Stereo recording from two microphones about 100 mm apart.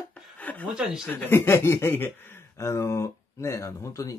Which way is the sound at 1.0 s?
20° left (ahead or behind).